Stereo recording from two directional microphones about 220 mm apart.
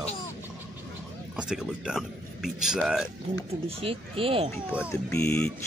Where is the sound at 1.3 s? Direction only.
5° right (ahead or behind).